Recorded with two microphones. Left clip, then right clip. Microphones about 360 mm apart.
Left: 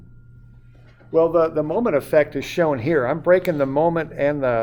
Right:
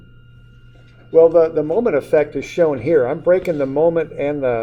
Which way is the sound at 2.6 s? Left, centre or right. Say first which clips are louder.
Right 4 dB; left.